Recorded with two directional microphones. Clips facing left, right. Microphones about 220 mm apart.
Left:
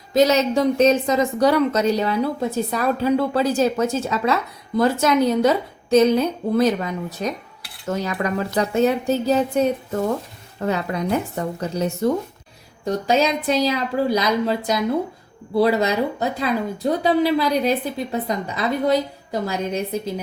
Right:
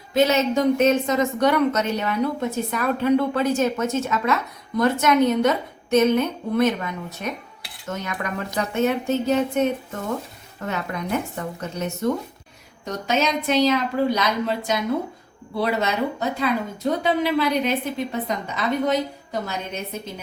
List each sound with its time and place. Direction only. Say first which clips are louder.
0.1 s a woman's voice: left 2 dB; 40° left (ahead or behind)
17.0 s a woman's voice: left 4 dB; 35° left (ahead or behind)